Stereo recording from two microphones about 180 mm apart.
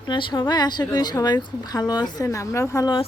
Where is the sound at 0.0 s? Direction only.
25° left (ahead or behind).